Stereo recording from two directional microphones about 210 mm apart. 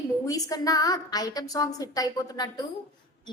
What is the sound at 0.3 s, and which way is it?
A woman's voice, 15° left (ahead or behind).